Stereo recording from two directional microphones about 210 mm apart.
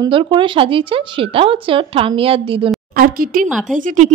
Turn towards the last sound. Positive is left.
turn(degrees=-35)  # may be behind; listen again after turning